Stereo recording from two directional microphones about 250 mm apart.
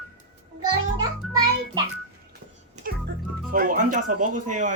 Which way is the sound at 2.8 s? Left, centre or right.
Right.